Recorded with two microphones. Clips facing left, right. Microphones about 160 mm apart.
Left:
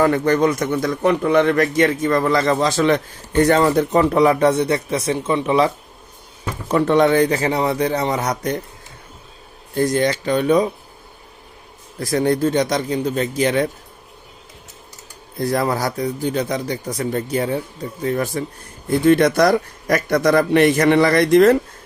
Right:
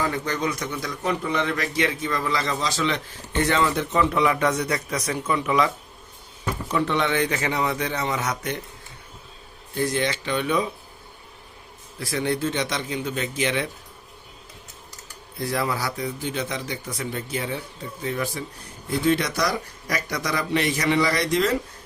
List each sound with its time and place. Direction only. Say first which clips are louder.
0.0 s a man's voice: left 10 dB; 55° left (ahead or behind); by 5.7 s 30° left (ahead or behind)
6.7 s speech: left 9 dB; 50° left (ahead or behind)
9.7 s speech: left 7 dB; 45° left (ahead or behind)
11.9 s speech: left 7 dB; 40° left (ahead or behind)
15.4 s a man's voice: left 6 dB; 45° left (ahead or behind)